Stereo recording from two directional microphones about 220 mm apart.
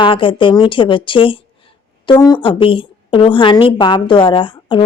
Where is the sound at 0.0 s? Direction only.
25° left (ahead or behind).